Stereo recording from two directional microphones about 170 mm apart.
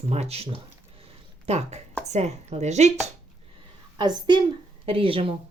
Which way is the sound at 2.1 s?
40° right (ahead or behind).